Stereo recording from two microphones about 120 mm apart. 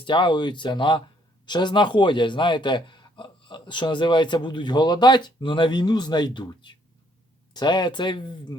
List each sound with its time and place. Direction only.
0.0 s a man's voice: 40° left (ahead or behind)